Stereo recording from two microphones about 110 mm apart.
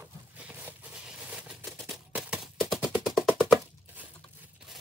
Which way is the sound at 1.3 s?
5° right (ahead or behind).